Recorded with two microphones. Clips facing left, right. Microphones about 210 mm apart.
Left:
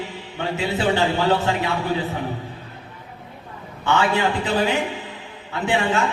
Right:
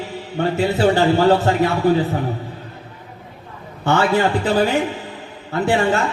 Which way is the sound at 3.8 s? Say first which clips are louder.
Right 3 dB; 45° right (ahead or behind).